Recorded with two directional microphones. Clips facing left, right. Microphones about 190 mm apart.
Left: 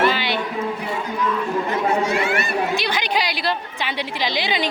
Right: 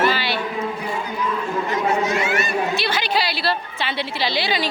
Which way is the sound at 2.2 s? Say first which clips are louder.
Even; 55° left (ahead or behind).